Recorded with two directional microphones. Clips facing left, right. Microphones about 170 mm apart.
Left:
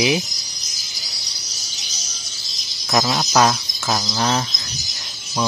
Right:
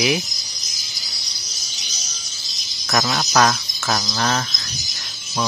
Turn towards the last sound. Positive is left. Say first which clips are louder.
# left 1 dB
turn(degrees=15)  # may be behind; listen again after turning